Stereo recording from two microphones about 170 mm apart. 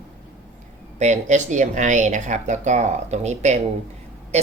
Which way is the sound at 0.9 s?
45° right (ahead or behind).